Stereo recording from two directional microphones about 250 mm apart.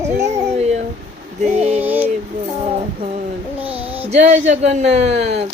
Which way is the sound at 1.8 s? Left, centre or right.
Centre.